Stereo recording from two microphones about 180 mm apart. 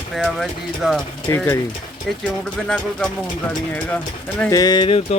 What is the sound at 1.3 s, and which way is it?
Speech, 15° left (ahead or behind).